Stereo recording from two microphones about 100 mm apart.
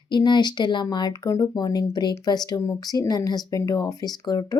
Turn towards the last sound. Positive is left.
turn(degrees=40)  # may be behind; listen again after turning